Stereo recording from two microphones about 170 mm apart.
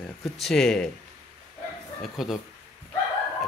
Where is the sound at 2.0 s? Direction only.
Centre (ahead or behind).